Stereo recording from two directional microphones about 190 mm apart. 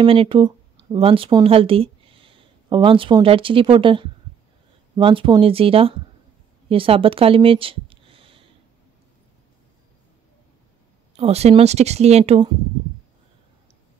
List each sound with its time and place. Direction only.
0.0 s speech: 30° right (ahead or behind)
11.1 s speech: 35° right (ahead or behind)